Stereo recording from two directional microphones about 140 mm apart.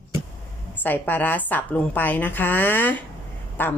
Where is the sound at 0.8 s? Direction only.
10° left (ahead or behind).